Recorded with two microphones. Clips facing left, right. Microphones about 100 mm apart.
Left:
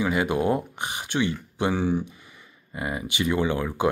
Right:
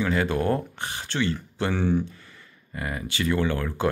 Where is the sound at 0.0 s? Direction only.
15° left (ahead or behind).